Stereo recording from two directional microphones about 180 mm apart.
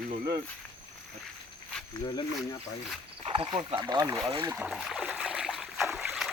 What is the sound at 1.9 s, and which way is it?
Speech, 20° left (ahead or behind).